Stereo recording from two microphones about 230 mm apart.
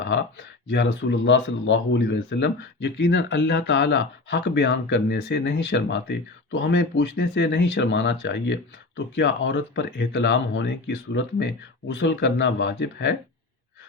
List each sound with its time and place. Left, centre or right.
0.0 s speech: left